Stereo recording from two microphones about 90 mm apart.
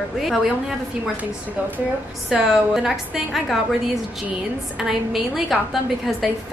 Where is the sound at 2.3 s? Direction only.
5° right (ahead or behind).